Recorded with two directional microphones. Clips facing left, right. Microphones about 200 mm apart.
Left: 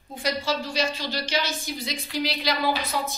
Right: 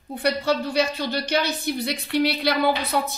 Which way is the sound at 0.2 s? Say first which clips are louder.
Right 5 dB; 60° right (ahead or behind).